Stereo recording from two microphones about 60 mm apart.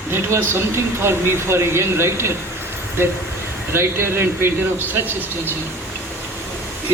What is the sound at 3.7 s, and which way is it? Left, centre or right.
Speech, right.